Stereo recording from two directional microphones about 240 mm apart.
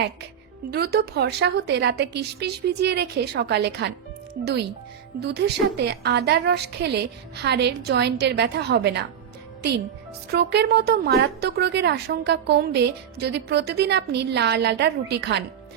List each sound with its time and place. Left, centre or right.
0.7 s speech: right
10.3 s speech: right